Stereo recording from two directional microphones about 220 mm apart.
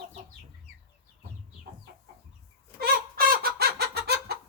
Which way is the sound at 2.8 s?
45° right (ahead or behind).